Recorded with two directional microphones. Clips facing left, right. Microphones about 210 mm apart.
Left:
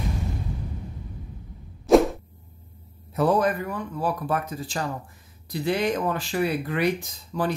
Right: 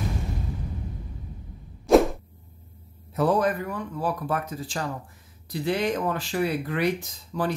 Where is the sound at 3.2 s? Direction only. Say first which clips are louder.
Left 1 dB; 10° left (ahead or behind).